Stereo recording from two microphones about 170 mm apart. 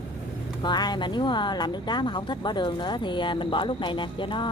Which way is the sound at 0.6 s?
25° left (ahead or behind).